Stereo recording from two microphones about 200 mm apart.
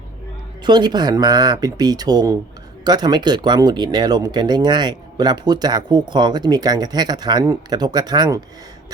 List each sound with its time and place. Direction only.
0.6 s speech: 20° right (ahead or behind)